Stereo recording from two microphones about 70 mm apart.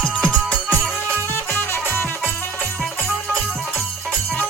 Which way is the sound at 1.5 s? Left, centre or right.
Left.